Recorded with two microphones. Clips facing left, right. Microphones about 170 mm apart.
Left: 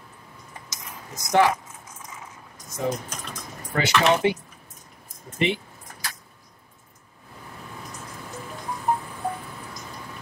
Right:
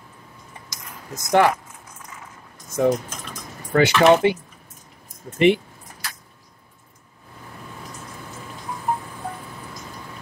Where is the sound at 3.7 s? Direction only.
60° right (ahead or behind).